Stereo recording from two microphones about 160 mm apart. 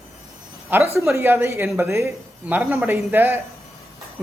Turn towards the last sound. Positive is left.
turn(degrees=-15)  # may be behind; listen again after turning